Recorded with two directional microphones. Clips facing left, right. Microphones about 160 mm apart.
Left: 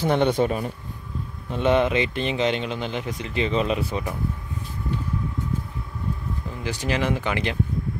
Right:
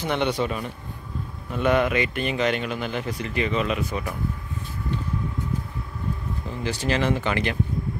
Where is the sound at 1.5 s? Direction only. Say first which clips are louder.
Left 1 dB; 25° left (ahead or behind).